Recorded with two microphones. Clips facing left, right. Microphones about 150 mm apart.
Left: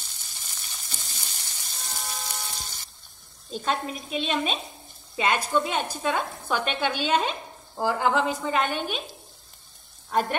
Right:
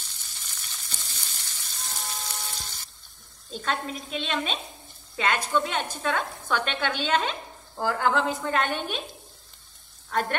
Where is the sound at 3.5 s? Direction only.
10° left (ahead or behind).